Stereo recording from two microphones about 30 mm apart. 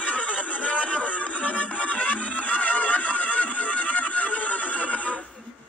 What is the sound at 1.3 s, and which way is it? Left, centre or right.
Music, left.